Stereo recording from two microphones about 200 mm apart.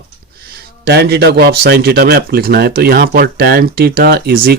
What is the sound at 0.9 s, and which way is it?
Speech, 55° right (ahead or behind).